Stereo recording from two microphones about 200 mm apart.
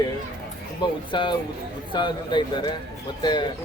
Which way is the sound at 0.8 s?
25° left (ahead or behind).